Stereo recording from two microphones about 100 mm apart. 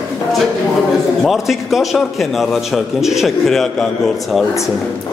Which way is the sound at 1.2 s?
Centre (ahead or behind).